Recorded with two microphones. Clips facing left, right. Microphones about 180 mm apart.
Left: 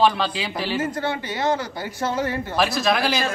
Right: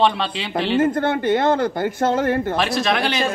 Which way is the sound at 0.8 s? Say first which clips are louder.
Right 7 dB; 55° right (ahead or behind).